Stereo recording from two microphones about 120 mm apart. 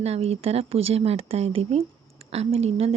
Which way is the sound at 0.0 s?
60° right (ahead or behind).